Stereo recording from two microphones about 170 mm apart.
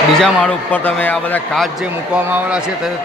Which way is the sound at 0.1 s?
5° left (ahead or behind).